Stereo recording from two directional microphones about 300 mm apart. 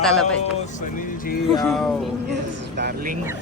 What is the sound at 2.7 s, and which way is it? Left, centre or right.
Speech, right.